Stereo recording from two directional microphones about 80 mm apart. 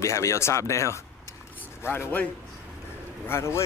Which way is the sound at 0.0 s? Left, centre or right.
Left.